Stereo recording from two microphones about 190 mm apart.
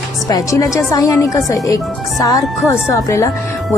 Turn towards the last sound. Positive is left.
turn(degrees=15)  # may be behind; listen again after turning